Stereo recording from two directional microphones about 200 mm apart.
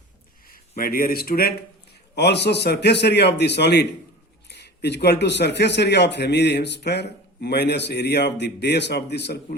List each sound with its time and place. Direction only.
0.8 s a man's voice: 45° left (ahead or behind)